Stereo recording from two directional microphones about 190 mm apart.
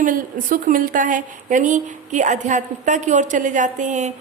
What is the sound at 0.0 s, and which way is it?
A woman's voice, 45° right (ahead or behind).